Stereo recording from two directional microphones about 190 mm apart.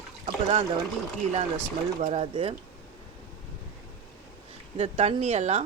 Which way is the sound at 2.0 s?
35° right (ahead or behind).